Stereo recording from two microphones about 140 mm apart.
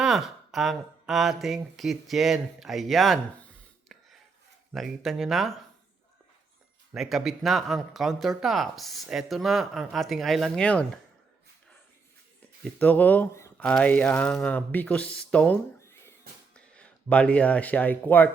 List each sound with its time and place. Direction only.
0.0 s speech: centre (ahead or behind)
6.9 s speech: centre (ahead or behind)
12.8 s speech: 10° left (ahead or behind)
15.8 s a sound: 20° left (ahead or behind)
16.6 s speech: 10° left (ahead or behind)